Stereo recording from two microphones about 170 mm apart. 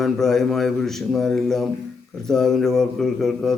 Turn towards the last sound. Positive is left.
turn(degrees=0)  # may be behind; listen again after turning